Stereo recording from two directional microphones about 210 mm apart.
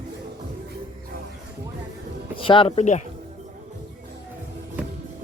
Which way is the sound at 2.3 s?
25° left (ahead or behind).